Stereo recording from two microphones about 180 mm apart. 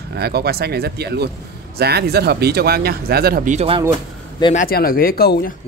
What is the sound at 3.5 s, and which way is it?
Speech, 30° right (ahead or behind).